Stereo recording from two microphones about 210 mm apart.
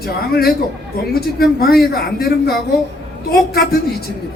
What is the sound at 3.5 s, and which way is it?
Speech, 50° left (ahead or behind).